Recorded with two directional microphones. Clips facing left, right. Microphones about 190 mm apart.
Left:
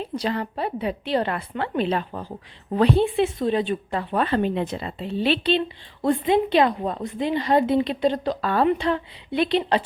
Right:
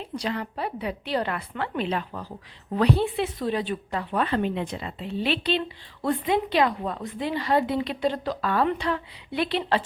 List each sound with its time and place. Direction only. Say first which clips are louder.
0.0 s a woman's voice: left 4 dB; 35° left (ahead or behind)